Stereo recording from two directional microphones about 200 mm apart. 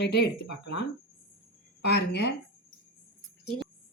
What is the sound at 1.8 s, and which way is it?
Speech, 55° left (ahead or behind).